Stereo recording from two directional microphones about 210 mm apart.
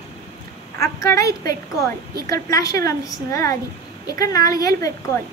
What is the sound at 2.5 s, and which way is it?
A woman's voice, 15° left (ahead or behind).